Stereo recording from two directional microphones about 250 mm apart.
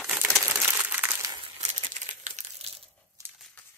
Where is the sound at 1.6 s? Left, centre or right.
Right.